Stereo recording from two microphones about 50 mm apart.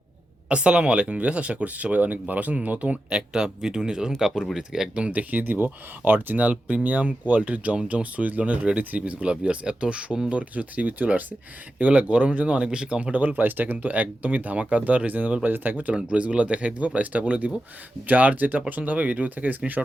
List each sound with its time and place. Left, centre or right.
0.4 s speech: right
4.9 s speech: right
5.3 s speech: right